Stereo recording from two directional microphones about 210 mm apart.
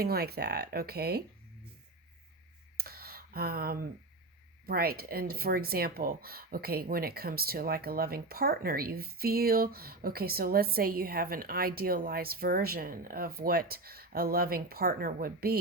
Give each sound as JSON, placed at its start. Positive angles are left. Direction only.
{"t": 0.0, "sound": "speech", "side_deg": -50}
{"t": 2.7, "sound": "a sound", "side_deg": -45}
{"t": 4.6, "sound": "speech", "side_deg": -45}